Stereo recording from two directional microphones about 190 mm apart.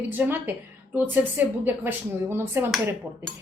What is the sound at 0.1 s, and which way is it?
A woman's voice, 10° right (ahead or behind).